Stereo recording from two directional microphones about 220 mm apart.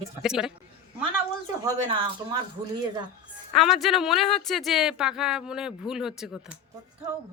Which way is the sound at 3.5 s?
Centre (ahead or behind).